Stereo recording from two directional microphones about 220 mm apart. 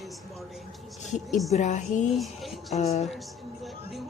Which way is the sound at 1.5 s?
30° left (ahead or behind).